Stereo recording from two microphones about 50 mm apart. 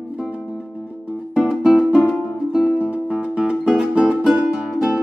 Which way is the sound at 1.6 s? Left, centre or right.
Centre.